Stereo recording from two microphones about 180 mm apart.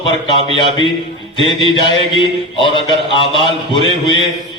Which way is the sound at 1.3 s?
25° left (ahead or behind).